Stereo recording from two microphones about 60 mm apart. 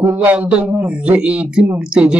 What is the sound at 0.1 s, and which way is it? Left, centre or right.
A man's voice, right.